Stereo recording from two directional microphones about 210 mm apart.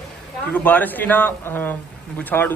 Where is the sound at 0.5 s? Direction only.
10° left (ahead or behind).